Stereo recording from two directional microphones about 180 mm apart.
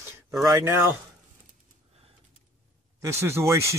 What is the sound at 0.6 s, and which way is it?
Speech, 15° right (ahead or behind).